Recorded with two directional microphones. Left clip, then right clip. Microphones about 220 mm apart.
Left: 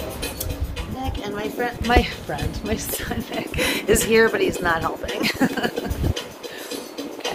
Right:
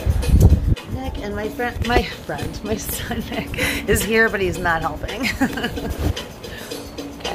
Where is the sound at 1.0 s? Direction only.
20° left (ahead or behind).